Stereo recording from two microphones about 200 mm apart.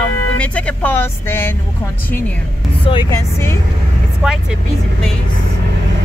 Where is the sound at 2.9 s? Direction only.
20° left (ahead or behind).